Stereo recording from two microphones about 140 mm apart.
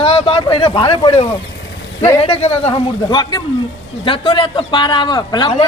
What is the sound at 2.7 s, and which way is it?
A woman's voice, 30° left (ahead or behind).